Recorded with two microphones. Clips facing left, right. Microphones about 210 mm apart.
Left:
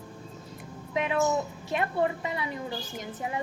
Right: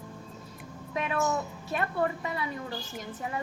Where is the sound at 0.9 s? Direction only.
25° left (ahead or behind).